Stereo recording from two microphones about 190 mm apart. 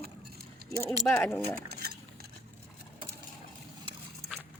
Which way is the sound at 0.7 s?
15° right (ahead or behind).